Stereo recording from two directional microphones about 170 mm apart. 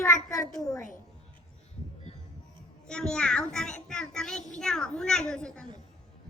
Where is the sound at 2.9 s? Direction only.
5° left (ahead or behind).